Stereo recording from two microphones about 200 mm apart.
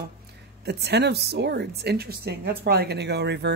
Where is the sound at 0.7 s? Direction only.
55° right (ahead or behind).